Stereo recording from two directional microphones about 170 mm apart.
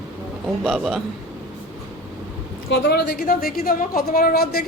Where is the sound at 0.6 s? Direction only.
Centre (ahead or behind).